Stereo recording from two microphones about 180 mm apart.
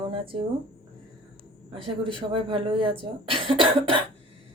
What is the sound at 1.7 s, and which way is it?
Speech, 30° right (ahead or behind).